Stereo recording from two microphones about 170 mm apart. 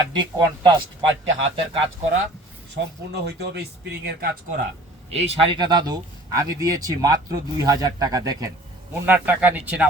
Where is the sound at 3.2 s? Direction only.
80° right.